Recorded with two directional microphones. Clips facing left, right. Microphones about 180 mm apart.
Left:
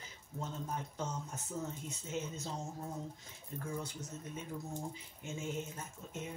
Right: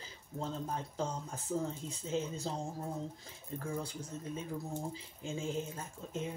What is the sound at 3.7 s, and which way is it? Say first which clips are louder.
Speech: right 2 dB; 30° right (ahead or behind).